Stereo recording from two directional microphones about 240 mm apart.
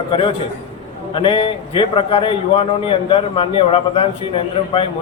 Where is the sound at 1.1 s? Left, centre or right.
Left.